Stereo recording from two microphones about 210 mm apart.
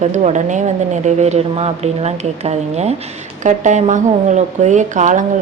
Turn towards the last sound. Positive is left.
turn(degrees=-35)  # may be behind; listen again after turning